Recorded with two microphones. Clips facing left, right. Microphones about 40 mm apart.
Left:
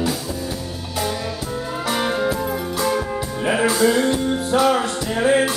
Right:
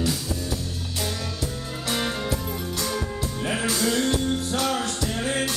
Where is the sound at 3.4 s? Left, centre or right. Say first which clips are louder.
Left 8 dB; left.